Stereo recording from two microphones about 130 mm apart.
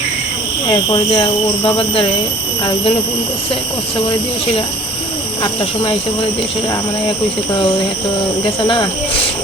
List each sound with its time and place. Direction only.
0.7 s speech: 40° left (ahead or behind)
5.4 s speech: 35° left (ahead or behind)
8.4 s speech: 40° left (ahead or behind)